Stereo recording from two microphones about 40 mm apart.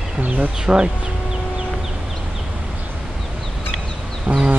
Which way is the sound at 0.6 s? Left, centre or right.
Right.